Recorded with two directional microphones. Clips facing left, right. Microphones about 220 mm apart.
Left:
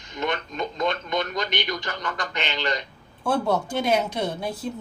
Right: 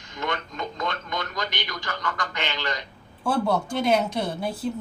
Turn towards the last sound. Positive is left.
turn(degrees=0)  # may be behind; listen again after turning